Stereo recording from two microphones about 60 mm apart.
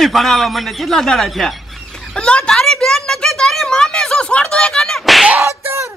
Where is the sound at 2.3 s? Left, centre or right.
Centre.